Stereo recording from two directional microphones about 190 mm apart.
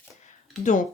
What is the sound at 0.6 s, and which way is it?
Speech, 40° left (ahead or behind).